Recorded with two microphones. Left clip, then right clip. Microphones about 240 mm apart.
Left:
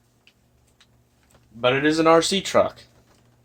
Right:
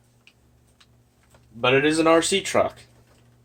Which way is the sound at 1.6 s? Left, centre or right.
Left.